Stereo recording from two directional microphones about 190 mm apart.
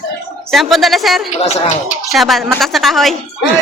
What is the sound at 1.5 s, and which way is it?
Speech, 40° left (ahead or behind).